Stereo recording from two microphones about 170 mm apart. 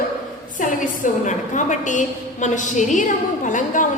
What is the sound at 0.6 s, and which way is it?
A woman's voice, 50° left (ahead or behind).